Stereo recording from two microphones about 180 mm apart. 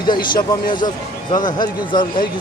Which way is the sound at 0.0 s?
25° left (ahead or behind).